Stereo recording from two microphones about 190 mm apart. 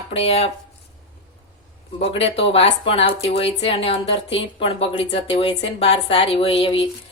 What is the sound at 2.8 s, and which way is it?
A woman's voice, 30° left (ahead or behind).